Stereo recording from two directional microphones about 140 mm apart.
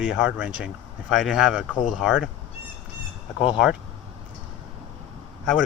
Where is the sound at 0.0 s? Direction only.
5° right (ahead or behind).